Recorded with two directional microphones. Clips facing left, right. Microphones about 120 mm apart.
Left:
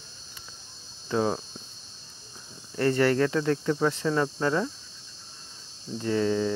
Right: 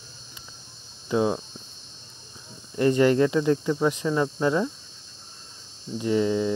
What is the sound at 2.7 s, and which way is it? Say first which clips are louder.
Cricket: right 3 dB; 20° right (ahead or behind).